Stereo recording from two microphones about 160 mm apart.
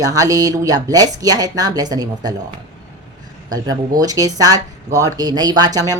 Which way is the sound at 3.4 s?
25° right (ahead or behind).